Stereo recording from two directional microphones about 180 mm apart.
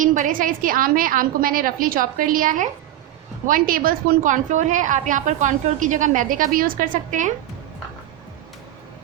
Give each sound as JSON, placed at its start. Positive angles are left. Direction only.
{"t": 0.0, "sound": "a woman's voice", "side_deg": -45}